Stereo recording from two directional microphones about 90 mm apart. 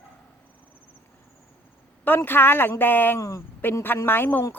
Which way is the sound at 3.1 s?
35° left (ahead or behind).